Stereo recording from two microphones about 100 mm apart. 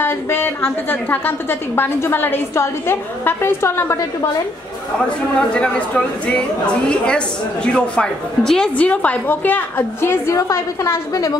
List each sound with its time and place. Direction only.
0.0 s a woman's voice: 20° left (ahead or behind)
5.5 s a woman's voice: 10° left (ahead or behind); by 11.3 s 35° left (ahead or behind)